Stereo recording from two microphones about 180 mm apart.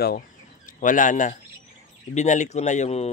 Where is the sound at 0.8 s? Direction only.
45° left (ahead or behind).